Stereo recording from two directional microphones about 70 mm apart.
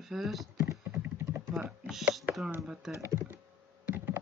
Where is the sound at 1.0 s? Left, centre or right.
Right.